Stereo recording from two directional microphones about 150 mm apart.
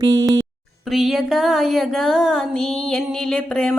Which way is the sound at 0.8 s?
Centre (ahead or behind).